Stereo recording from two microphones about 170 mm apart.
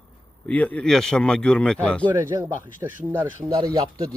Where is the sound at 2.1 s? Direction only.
15° right (ahead or behind).